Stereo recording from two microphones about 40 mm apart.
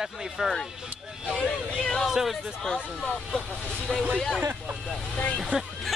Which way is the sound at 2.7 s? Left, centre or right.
Left.